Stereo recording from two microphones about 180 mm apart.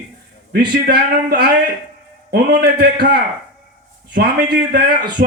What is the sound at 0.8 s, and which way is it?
A man's voice, 60° right (ahead or behind).